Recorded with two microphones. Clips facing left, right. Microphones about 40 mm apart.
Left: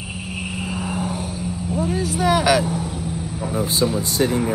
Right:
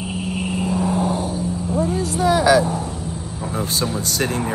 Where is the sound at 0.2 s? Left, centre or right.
Centre.